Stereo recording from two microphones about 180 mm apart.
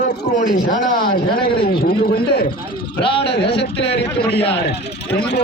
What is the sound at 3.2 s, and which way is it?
A man's voice, 70° left (ahead or behind).